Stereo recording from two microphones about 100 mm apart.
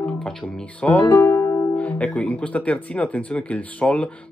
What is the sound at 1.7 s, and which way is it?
Speech, 15° left (ahead or behind).